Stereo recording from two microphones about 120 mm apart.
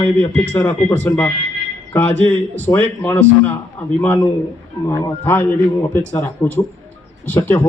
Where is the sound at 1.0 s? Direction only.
10° left (ahead or behind).